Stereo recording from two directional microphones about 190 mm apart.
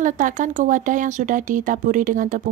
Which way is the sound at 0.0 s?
40° right (ahead or behind).